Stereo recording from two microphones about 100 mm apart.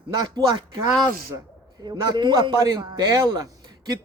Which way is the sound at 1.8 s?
45° right (ahead or behind).